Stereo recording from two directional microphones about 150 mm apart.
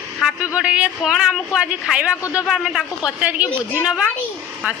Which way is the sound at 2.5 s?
5° right (ahead or behind).